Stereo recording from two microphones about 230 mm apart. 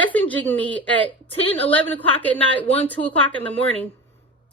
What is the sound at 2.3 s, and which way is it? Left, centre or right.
A woman's voice, centre.